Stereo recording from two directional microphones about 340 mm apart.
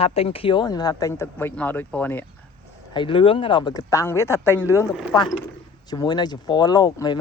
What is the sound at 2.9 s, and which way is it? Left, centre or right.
Speech, centre.